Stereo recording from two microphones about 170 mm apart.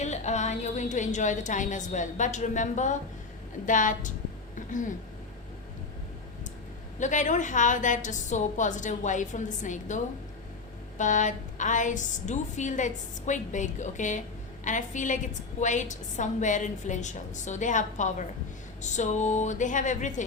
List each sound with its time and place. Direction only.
0.0 s a woman's voice: 40° left (ahead or behind)
7.0 s a woman's voice: 45° left (ahead or behind)